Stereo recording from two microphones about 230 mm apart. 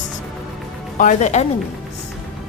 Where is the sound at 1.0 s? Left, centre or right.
Left.